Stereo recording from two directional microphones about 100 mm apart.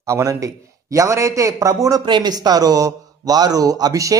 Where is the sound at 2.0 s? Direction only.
50° right (ahead or behind).